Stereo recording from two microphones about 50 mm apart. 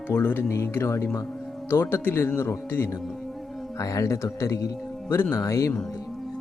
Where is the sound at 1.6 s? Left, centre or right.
Left.